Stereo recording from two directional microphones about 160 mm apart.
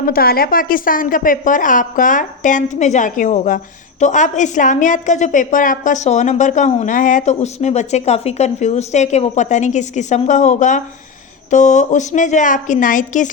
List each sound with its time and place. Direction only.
0.1 s a woman's voice: 70° left (ahead or behind); by 13.3 s 55° left (ahead or behind)